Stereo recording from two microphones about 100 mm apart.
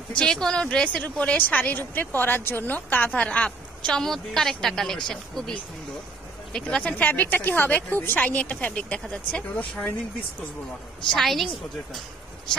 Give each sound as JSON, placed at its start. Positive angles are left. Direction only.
{"t": 0.2, "sound": "a woman's voice", "side_deg": 5}
{"t": 6.5, "sound": "a woman's voice", "side_deg": 10}
{"t": 11.1, "sound": "a woman's voice", "side_deg": 0}